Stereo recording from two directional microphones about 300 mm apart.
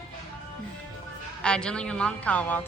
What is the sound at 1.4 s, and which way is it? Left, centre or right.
A woman's voice, centre.